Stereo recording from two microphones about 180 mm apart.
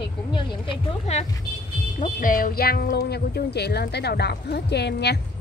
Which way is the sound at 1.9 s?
50° left (ahead or behind).